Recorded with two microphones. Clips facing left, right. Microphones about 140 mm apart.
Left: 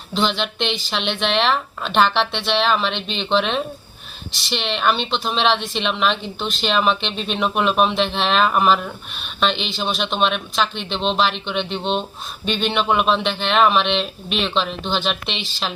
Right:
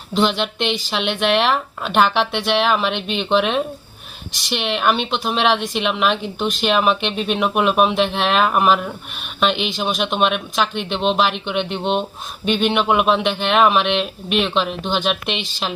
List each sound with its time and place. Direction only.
0.1 s a woman's voice: 10° right (ahead or behind)